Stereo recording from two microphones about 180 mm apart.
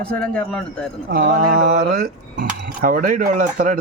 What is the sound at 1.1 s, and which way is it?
Speech, 50° right (ahead or behind).